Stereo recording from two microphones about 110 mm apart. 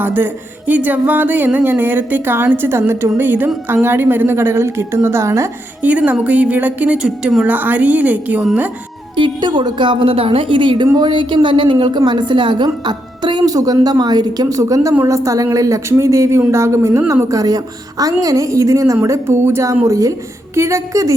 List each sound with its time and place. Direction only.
0.0 s a woman's voice: 15° right (ahead or behind)
5.8 s speech: 15° right (ahead or behind)
9.1 s a woman's voice: 45° right (ahead or behind); by 21.1 s 30° right (ahead or behind)